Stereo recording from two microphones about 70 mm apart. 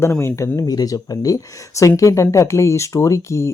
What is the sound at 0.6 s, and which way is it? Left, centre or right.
Speech, left.